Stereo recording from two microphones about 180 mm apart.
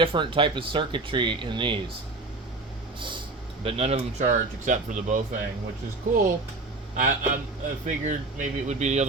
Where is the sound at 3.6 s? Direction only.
35° right (ahead or behind).